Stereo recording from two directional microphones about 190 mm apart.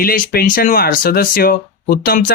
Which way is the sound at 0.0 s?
50° left (ahead or behind).